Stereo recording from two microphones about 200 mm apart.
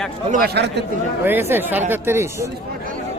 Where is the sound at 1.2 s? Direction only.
10° right (ahead or behind).